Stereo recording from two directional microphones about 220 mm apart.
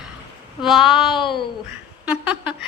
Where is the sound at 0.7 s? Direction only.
Centre (ahead or behind).